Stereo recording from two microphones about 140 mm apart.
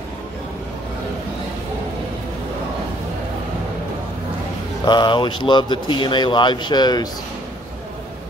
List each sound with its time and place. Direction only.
4.8 s a man's voice: 30° left (ahead or behind)